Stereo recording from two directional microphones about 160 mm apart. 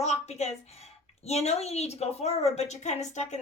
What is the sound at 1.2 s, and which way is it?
A child's voice, 45° left (ahead or behind).